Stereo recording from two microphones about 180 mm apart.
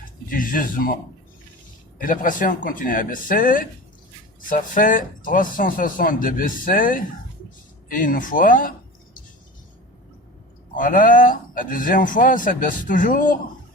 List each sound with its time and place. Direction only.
0.3 s speech: 50° left (ahead or behind)
2.0 s speech: 50° left (ahead or behind)
10.8 s speech: 50° left (ahead or behind)